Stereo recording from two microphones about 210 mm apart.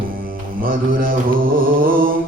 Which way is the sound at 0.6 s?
45° right (ahead or behind).